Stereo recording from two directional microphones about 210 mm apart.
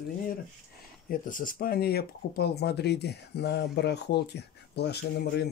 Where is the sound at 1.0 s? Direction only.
40° left (ahead or behind).